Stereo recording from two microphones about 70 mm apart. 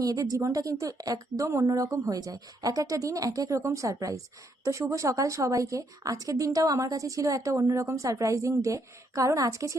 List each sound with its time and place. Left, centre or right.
0.0 s a woman's voice: right